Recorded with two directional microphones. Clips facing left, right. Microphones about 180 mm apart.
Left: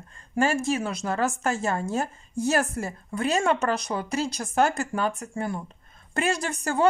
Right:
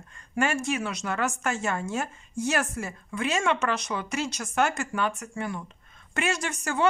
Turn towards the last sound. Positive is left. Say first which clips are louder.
# left 3 dB
turn(degrees=35)  # may be behind; listen again after turning